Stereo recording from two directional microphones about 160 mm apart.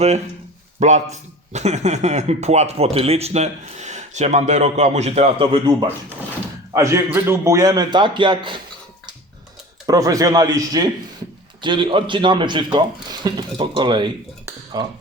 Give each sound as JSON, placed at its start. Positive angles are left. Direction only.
{"t": 0.8, "sound": "a man's voice", "side_deg": -45}
{"t": 6.7, "sound": "speech", "side_deg": -15}
{"t": 9.8, "sound": "speech", "side_deg": -20}